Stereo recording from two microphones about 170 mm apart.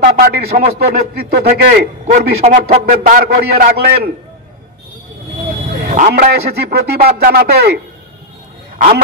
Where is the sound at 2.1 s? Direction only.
40° right (ahead or behind); by 3.7 s 65° right (ahead or behind).